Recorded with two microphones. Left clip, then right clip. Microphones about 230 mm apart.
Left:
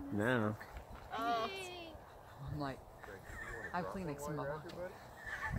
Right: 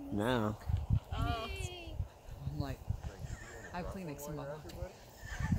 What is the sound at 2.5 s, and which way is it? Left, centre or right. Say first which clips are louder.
Speech: left 2 dB; centre.